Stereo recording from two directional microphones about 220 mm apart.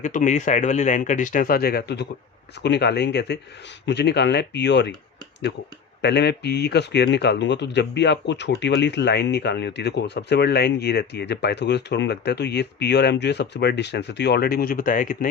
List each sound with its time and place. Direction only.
0.0 s speech: 35° left (ahead or behind); by 4.9 s 50° left (ahead or behind)
6.0 s speech: 50° left (ahead or behind)